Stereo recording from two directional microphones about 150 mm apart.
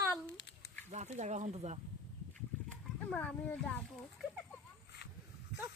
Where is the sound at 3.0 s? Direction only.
10° left (ahead or behind).